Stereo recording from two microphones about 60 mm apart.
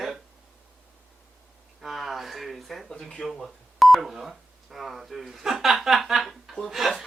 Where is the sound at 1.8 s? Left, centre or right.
Centre.